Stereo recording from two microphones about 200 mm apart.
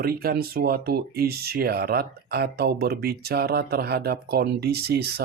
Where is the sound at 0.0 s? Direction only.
50° right (ahead or behind).